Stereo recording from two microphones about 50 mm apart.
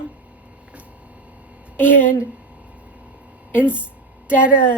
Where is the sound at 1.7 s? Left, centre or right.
Left.